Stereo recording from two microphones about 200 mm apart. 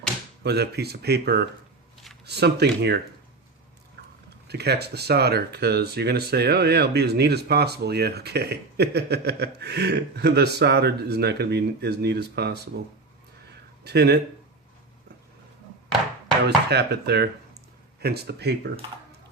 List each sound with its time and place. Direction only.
0.4 s speech: 55° right (ahead or behind)
4.4 s speech: 55° right (ahead or behind)
13.5 s a sound: 55° right (ahead or behind)
16.6 s speech: 55° right (ahead or behind)